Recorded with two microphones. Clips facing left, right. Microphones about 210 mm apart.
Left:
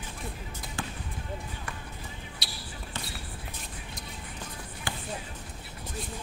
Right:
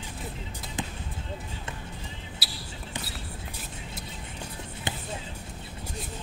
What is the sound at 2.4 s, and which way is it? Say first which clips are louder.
Basketball bounce: right 2 dB; 5° right (ahead or behind).